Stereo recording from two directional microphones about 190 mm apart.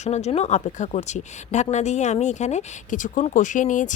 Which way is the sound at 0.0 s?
35° left (ahead or behind).